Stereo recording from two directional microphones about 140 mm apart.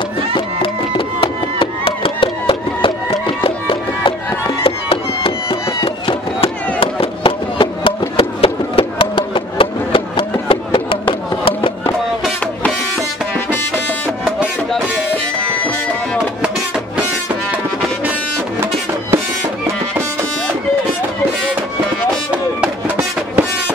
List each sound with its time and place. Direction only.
0.3 s music: 40° left (ahead or behind)
8.2 s a sound: 45° left (ahead or behind)
15.4 s music: 10° left (ahead or behind)